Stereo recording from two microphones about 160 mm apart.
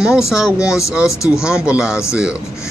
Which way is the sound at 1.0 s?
20° left (ahead or behind).